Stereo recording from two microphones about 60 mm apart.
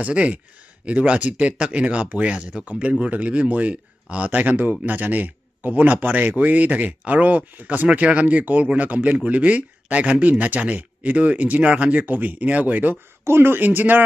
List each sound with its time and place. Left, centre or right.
0.0 s speech: right
13.2 s speech: right